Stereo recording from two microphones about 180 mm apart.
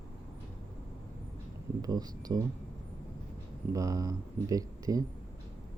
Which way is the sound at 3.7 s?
20° right (ahead or behind).